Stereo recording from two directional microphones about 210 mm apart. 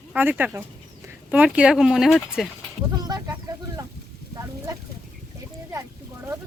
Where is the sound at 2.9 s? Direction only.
20° right (ahead or behind).